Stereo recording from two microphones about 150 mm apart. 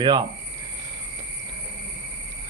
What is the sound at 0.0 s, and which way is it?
Speech, 30° right (ahead or behind).